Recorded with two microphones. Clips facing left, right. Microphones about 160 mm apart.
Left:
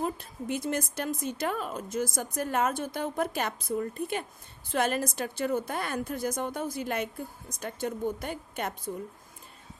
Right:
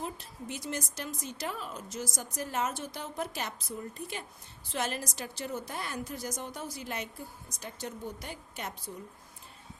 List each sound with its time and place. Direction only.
0.0 s a woman's voice: 55° left (ahead or behind)